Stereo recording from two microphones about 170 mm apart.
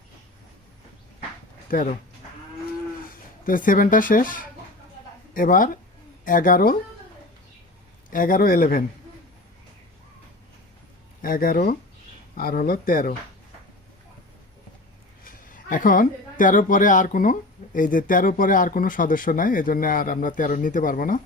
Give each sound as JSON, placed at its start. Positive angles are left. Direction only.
{"t": 1.7, "sound": "speech", "side_deg": 55}
{"t": 3.1, "sound": "speech", "side_deg": 55}
{"t": 8.1, "sound": "speech", "side_deg": 55}
{"t": 11.2, "sound": "speech", "side_deg": 55}
{"t": 15.2, "sound": "speech", "side_deg": 55}